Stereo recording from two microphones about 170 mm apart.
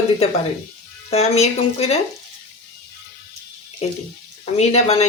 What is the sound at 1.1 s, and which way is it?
Speech, 40° left (ahead or behind).